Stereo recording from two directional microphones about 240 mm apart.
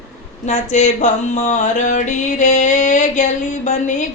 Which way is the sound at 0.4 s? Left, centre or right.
Left.